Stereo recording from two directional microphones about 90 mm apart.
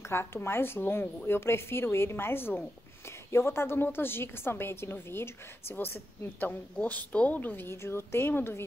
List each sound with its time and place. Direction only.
0.1 s a woman's voice: 30° left (ahead or behind)